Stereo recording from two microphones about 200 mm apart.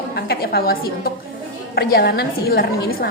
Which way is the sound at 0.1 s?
50° left (ahead or behind).